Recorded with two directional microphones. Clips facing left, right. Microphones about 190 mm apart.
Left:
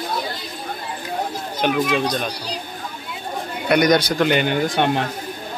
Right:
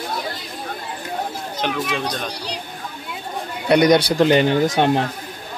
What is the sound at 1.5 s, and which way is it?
Speech, 10° left (ahead or behind).